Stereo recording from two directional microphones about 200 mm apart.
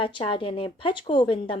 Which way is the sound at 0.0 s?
25° left (ahead or behind).